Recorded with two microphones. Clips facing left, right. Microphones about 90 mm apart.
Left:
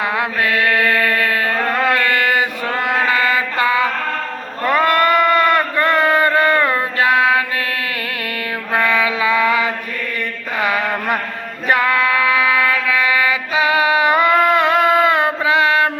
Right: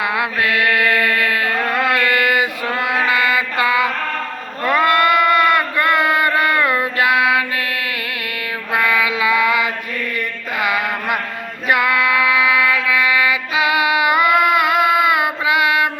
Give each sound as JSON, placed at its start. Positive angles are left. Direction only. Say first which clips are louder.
{"t": 0.0, "sound": "music", "louder": "even", "side_deg": 35}
{"t": 1.9, "sound": "a sound", "louder": "even", "side_deg": 40}
{"t": 3.1, "sound": "mantra", "louder": "left 1 dB", "side_deg": 40}
{"t": 4.6, "sound": "a sound", "louder": "even", "side_deg": 30}
{"t": 8.7, "sound": "female singing", "louder": "left 1 dB", "side_deg": 35}
{"t": 11.7, "sound": "music", "louder": "even", "side_deg": 35}